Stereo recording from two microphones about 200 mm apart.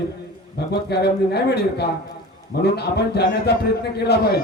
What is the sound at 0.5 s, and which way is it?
A man's voice, 55° left (ahead or behind).